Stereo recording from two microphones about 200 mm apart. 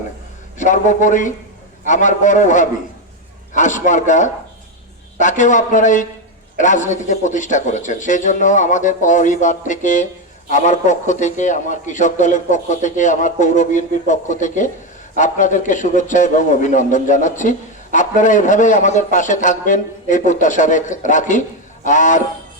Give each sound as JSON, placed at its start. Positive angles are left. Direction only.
{"t": 0.6, "sound": "a man's voice", "side_deg": 40}